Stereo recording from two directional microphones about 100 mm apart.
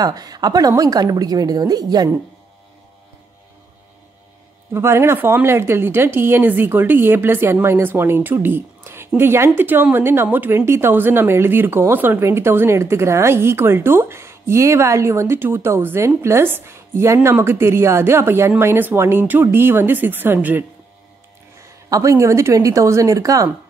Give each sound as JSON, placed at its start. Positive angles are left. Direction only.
{"t": 0.0, "sound": "a woman's voice", "side_deg": -40}
{"t": 4.7, "sound": "speech", "side_deg": -25}
{"t": 21.6, "sound": "a woman's voice", "side_deg": -35}